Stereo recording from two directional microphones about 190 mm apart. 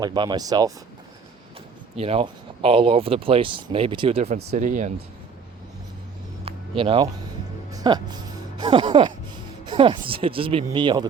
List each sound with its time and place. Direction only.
0.0 s speech: 25° right (ahead or behind)
2.0 s speech: 30° right (ahead or behind)
6.4 s music: 30° right (ahead or behind)
7.7 s speech: 20° right (ahead or behind)